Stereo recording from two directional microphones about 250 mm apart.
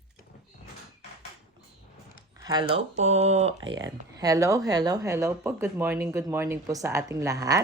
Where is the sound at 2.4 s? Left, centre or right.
Centre.